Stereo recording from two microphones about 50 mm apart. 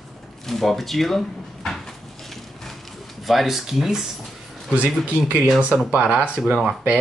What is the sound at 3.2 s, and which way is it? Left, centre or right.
Speech, centre.